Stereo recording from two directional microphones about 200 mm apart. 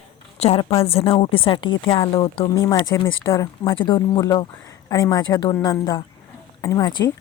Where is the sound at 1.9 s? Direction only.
25° left (ahead or behind).